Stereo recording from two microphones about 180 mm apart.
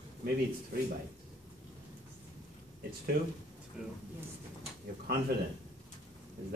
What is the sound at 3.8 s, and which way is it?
Speech, 5° right (ahead or behind).